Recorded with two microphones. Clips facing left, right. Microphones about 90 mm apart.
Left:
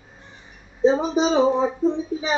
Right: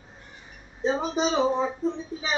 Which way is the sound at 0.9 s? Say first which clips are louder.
Left 6 dB; 15° left (ahead or behind).